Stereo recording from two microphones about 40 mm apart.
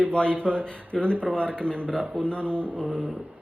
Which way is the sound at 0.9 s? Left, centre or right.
Centre.